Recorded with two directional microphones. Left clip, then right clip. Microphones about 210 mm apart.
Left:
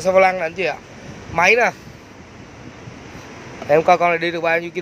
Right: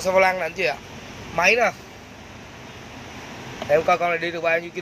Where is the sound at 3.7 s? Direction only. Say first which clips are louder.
Left 5 dB; 25° left (ahead or behind).